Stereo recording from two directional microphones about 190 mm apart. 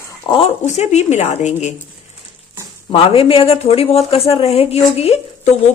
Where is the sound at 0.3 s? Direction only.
30° left (ahead or behind).